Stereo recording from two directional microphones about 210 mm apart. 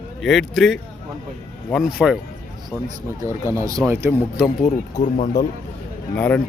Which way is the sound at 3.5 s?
15° right (ahead or behind).